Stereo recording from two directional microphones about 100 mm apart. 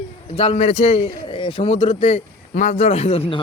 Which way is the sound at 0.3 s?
85° left.